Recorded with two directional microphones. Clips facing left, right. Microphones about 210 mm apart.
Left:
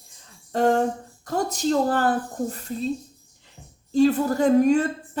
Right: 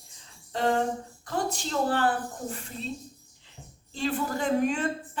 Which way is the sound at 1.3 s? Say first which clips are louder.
Left 7 dB; 40° left (ahead or behind).